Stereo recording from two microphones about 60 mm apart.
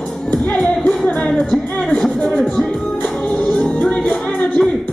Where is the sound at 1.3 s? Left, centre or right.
Centre.